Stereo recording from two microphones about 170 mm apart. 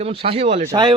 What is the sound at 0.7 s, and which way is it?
Speech, 25° right (ahead or behind).